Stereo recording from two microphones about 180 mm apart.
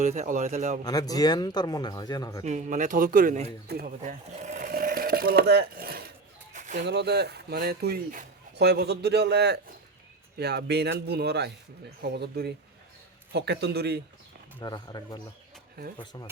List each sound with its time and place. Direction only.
0.0 s speech: 45° right (ahead or behind)
0.9 s speech: 20° left (ahead or behind)
2.4 s speech: 40° right (ahead or behind)
4.0 s speech: 40° right (ahead or behind); by 6.1 s 55° right (ahead or behind)
6.5 s bird: 45° right (ahead or behind)
6.8 s a man's voice: 70° right (ahead or behind)
14.6 s speech: 20° left (ahead or behind)